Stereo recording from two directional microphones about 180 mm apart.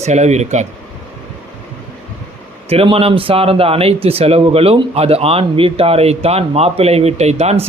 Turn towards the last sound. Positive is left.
turn(degrees=-35)  # may be behind; listen again after turning